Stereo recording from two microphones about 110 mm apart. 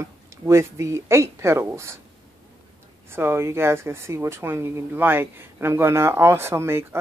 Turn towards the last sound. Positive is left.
turn(degrees=-20)  # may be behind; listen again after turning